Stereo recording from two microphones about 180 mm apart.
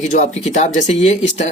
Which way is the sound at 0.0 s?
40° left (ahead or behind).